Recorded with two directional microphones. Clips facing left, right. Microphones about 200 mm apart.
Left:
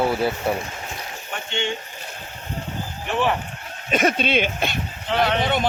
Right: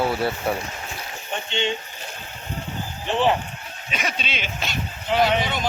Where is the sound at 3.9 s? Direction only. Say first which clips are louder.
Left 10 dB; 50° left (ahead or behind).